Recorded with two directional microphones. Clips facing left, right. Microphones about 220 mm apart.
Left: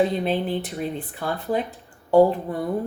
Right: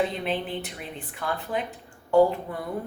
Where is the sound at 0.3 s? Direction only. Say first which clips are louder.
Left 5 dB; 35° left (ahead or behind).